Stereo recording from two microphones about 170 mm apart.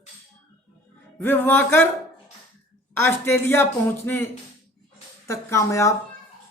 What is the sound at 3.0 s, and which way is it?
Speech, 15° left (ahead or behind).